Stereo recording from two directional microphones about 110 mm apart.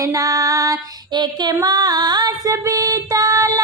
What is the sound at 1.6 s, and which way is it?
Female singing, 35° right (ahead or behind).